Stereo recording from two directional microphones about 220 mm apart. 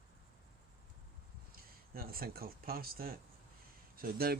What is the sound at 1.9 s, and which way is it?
Speech, 40° right (ahead or behind).